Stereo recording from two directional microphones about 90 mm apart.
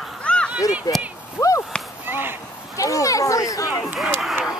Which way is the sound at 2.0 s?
25° right (ahead or behind).